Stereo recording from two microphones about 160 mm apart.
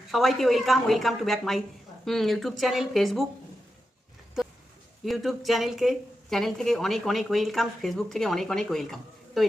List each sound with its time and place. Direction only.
0.1 s speech: centre (ahead or behind)
5.0 s speech: centre (ahead or behind)